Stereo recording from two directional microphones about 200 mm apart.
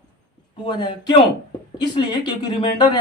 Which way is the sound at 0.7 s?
25° left (ahead or behind).